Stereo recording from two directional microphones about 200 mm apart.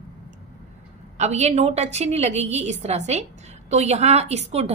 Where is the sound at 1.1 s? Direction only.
35° right (ahead or behind).